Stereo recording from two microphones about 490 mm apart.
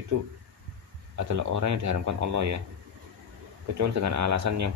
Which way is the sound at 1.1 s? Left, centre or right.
Right.